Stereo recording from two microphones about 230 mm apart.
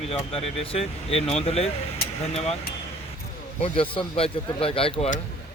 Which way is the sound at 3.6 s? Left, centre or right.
Left.